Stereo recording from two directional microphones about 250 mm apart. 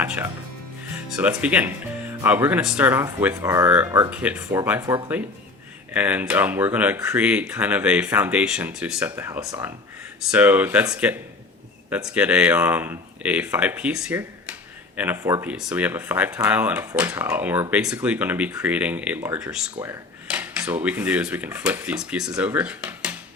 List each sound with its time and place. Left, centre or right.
0.0 s speech: centre